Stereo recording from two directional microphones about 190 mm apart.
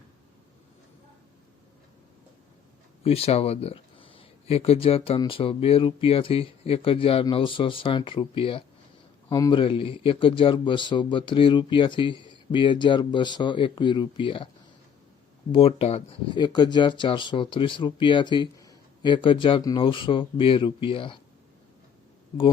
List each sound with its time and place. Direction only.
3.0 s speech: 30° left (ahead or behind)
15.5 s speech: 30° left (ahead or behind)